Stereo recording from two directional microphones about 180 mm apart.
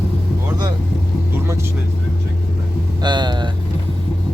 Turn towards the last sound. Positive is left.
turn(degrees=-25)  # may be behind; listen again after turning